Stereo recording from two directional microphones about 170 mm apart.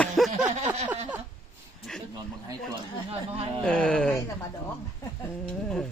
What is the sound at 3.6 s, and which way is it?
Speech, 5° left (ahead or behind).